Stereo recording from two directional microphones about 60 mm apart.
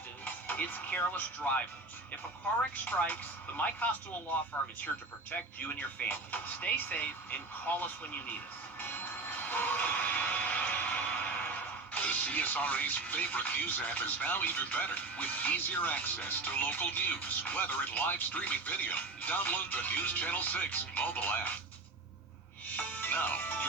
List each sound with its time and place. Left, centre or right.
0.4 s speech: left
2.7 s speech: left
6.1 s speech: left
8.8 s music: left
22.7 s music: left